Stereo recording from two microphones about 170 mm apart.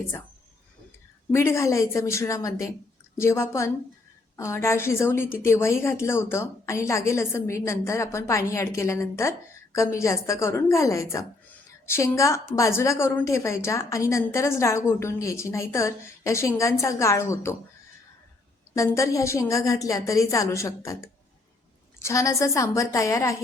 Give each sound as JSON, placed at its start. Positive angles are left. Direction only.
{"t": 1.3, "sound": "a woman's voice", "side_deg": 15}
{"t": 18.7, "sound": "a woman's voice", "side_deg": 20}